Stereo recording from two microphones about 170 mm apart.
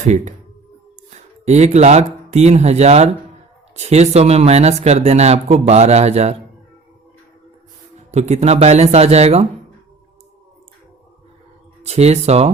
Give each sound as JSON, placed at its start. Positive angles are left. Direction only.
{"t": 0.0, "sound": "speech", "side_deg": -45}
{"t": 8.1, "sound": "speech", "side_deg": -40}
{"t": 11.9, "sound": "speech", "side_deg": -40}